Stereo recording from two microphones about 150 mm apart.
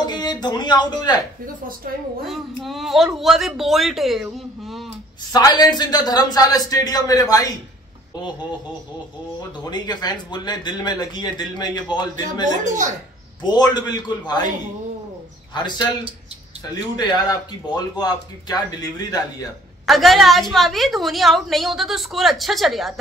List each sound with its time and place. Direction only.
0.0 s speech: 30° left (ahead or behind)
2.2 s a woman's voice: centre (ahead or behind)
5.3 s speech: 25° left (ahead or behind)
9.4 s speech: 25° left (ahead or behind)
12.6 s a woman's voice: 55° right (ahead or behind)
13.4 s speech: 30° left (ahead or behind)
15.5 s speech: 30° left (ahead or behind)
16.9 s speech: 25° left (ahead or behind)
19.9 s a woman's voice: centre (ahead or behind)